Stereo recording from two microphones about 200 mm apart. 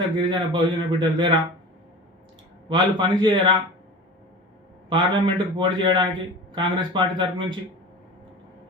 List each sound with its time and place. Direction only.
0.2 s a man's voice: 25° right (ahead or behind)
2.6 s a man's voice: 25° right (ahead or behind)
4.9 s a man's voice: 25° right (ahead or behind)